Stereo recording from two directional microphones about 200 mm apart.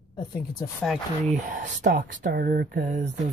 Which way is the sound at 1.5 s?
45° right (ahead or behind).